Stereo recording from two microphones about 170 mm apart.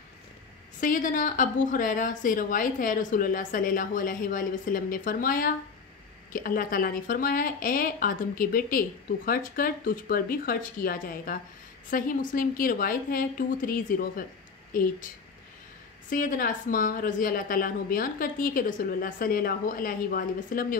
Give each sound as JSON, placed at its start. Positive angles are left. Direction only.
{"t": 0.7, "sound": "a woman's voice", "side_deg": 50}
{"t": 16.1, "sound": "a woman's voice", "side_deg": 55}